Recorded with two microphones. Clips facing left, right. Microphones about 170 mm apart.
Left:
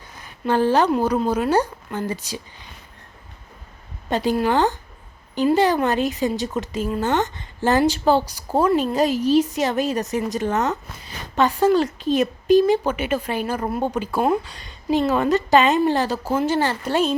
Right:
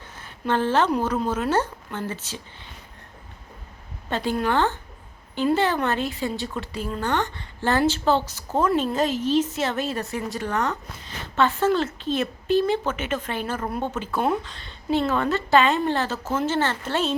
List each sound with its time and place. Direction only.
0.2 s a sound: 10° left (ahead or behind)
1.3 s speech: 10° left (ahead or behind)
4.1 s speech: 15° left (ahead or behind)